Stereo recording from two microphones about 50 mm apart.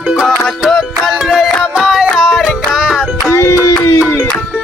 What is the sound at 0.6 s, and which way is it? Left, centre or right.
Music, centre.